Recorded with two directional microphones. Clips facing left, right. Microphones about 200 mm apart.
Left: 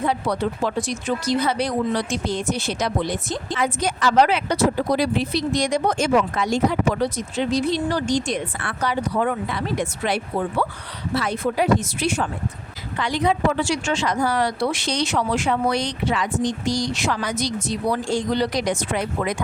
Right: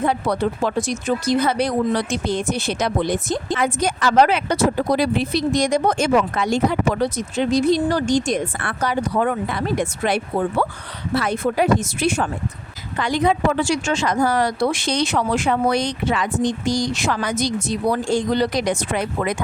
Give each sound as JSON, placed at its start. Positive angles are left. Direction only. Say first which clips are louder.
{"t": 0.0, "sound": "speech", "louder": "right 2 dB", "side_deg": -55}